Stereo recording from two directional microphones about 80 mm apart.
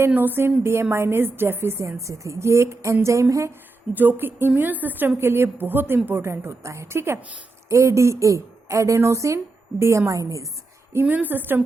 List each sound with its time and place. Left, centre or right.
0.1 s a woman's voice: right
3.9 s a woman's voice: right
11.0 s a woman's voice: right